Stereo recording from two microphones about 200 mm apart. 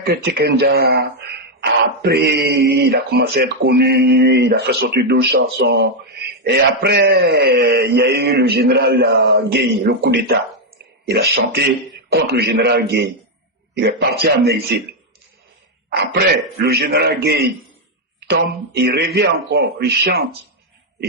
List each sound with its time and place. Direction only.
0.0 s speech: 50° right (ahead or behind)
15.9 s speech: 50° right (ahead or behind)